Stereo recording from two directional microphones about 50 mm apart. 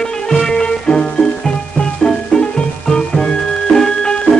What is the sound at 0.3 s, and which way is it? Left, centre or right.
Music, centre.